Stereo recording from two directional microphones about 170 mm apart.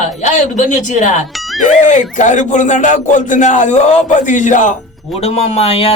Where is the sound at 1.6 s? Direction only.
45° left (ahead or behind).